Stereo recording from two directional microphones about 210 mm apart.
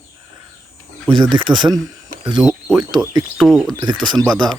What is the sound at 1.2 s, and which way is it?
Speech, 20° right (ahead or behind).